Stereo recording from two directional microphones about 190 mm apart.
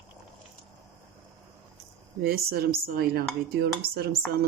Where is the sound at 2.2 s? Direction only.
55° right (ahead or behind).